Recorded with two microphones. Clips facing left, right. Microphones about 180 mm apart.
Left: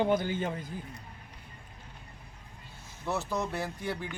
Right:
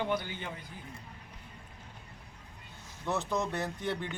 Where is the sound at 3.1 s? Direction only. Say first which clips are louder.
Even; 5° left (ahead or behind).